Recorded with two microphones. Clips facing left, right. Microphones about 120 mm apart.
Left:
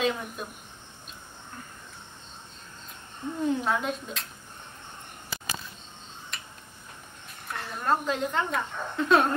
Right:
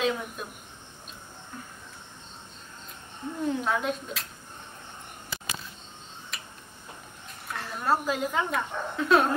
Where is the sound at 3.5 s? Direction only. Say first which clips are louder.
Even; centre (ahead or behind).